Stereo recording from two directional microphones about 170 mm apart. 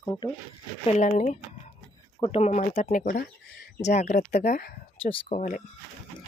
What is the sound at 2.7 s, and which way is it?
Speech, 50° left (ahead or behind).